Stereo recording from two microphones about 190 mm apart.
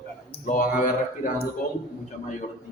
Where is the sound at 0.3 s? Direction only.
45° left (ahead or behind).